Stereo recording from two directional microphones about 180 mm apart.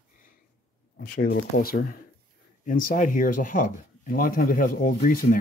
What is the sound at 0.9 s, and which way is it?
Speech, 55° left (ahead or behind).